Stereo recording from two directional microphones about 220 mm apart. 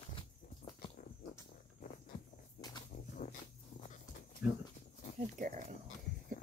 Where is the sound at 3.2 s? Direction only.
35° left (ahead or behind).